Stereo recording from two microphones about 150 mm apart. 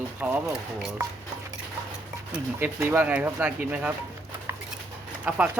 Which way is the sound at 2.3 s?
15° right (ahead or behind).